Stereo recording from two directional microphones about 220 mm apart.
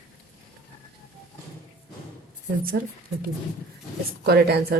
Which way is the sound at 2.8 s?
45° right (ahead or behind).